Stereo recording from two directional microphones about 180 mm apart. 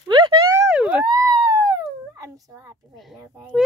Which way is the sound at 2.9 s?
Centre (ahead or behind).